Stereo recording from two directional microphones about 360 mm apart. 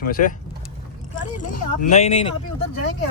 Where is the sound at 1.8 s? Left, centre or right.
Centre.